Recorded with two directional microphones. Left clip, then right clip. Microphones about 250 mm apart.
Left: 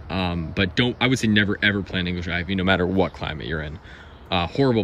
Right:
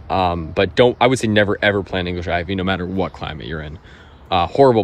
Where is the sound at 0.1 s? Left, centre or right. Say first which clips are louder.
Right 9 dB; centre.